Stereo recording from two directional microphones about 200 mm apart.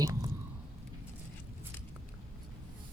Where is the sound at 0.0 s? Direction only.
15° right (ahead or behind).